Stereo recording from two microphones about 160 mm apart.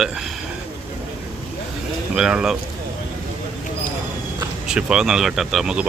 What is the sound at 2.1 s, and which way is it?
Speech, 5° right (ahead or behind).